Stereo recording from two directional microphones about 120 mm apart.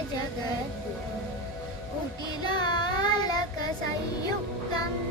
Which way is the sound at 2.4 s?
35° left (ahead or behind).